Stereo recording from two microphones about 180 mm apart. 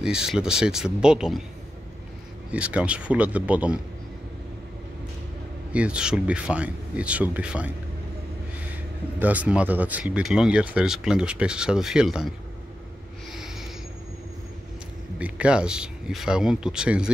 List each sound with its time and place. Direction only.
0.0 s speech: 5° right (ahead or behind)
2.5 s speech: 5° right (ahead or behind)
5.7 s speech: 5° right (ahead or behind)
9.2 s speech: 10° right (ahead or behind)
13.3 s a sound: centre (ahead or behind)
15.1 s speech: 5° right (ahead or behind)